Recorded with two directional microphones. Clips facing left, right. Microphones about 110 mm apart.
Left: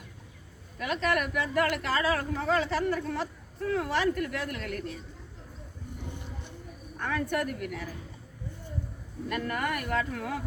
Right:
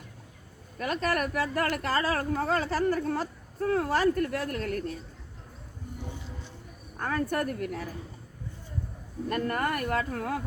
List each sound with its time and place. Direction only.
0.8 s speech: 40° right (ahead or behind)
7.0 s speech: 40° right (ahead or behind)
9.3 s speech: 40° right (ahead or behind)